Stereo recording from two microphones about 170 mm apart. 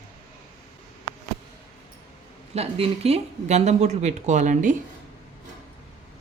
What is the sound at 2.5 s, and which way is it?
Speech, 35° right (ahead or behind).